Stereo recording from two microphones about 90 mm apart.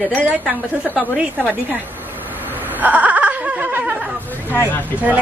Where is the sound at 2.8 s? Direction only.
20° right (ahead or behind).